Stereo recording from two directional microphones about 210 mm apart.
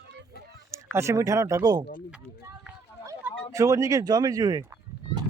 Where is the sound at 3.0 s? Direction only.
15° right (ahead or behind).